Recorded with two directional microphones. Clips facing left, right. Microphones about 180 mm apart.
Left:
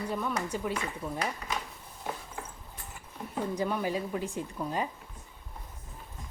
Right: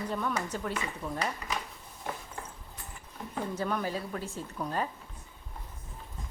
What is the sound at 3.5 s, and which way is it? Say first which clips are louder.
Speech: left 2 dB; 15° left (ahead or behind).